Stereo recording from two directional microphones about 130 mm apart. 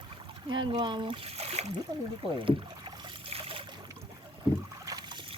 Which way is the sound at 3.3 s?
45° right (ahead or behind).